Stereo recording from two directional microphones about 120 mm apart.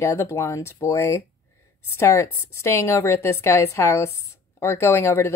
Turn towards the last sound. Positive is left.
turn(degrees=20)  # may be behind; listen again after turning